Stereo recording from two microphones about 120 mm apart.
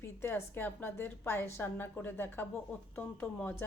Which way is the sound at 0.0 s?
20° left (ahead or behind).